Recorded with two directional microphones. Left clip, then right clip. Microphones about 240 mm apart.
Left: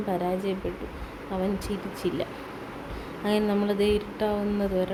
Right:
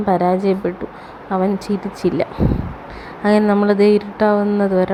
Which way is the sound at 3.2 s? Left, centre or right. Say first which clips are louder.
Right 11 dB; centre.